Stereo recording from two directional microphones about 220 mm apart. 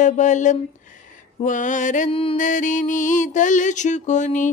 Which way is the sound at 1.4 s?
35° left (ahead or behind).